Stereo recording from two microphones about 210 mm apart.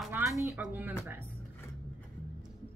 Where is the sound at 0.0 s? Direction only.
5° right (ahead or behind).